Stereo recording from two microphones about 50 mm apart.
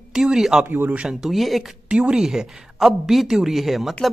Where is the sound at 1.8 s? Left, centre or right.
Centre.